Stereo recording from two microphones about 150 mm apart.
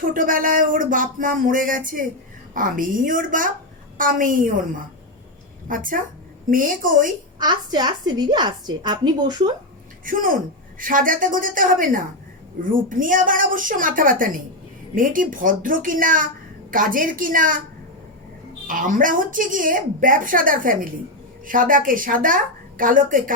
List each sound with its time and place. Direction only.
0.1 s a woman's voice: 65° right (ahead or behind)
5.6 s a woman's voice: 65° right (ahead or behind)
7.3 s a woman's voice: 30° right (ahead or behind)
10.1 s a woman's voice: 65° right (ahead or behind)
18.7 s a woman's voice: 65° right (ahead or behind)